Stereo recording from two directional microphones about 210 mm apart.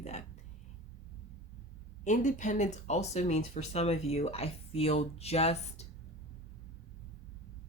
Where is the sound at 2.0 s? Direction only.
35° left (ahead or behind).